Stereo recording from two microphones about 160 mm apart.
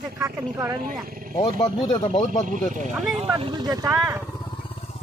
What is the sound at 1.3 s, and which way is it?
Speech, 25° left (ahead or behind).